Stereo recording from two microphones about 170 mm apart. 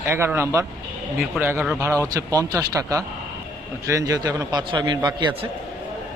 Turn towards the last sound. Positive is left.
turn(degrees=-25)  # may be behind; listen again after turning